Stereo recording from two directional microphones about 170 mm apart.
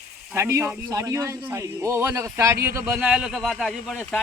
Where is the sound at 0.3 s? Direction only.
15° right (ahead or behind).